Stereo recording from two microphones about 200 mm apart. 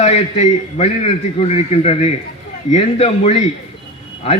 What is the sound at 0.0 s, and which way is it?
A man's voice, 30° left (ahead or behind).